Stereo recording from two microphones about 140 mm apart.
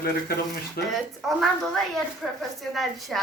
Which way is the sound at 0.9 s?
Centre (ahead or behind).